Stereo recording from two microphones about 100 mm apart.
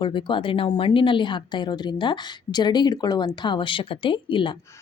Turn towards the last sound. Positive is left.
turn(degrees=55)  # may be behind; listen again after turning